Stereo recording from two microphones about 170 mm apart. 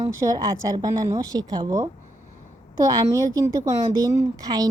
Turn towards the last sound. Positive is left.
turn(degrees=-20)  # may be behind; listen again after turning